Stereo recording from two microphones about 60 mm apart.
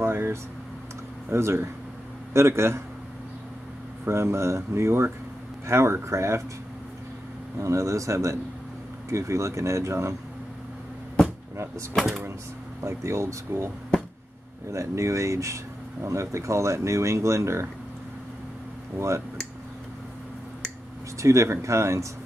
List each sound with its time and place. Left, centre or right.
0.0 s a sound: right
1.3 s speech: right
4.1 s speech: right
7.5 s speech: right
11.5 s speech: right
12.8 s speech: right
14.7 s speech: right
18.9 s speech: right
21.2 s speech: right